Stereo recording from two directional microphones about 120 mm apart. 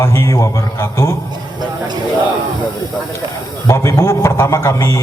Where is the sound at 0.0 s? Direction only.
25° left (ahead or behind).